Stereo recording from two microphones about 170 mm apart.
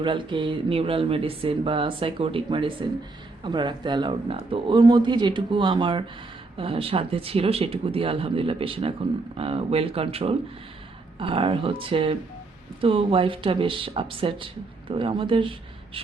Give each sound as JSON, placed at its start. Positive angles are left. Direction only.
{"t": 0.0, "sound": "speech", "side_deg": -30}